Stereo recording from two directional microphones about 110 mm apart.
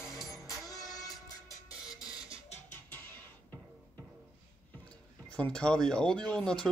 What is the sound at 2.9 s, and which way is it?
Music, 20° left (ahead or behind).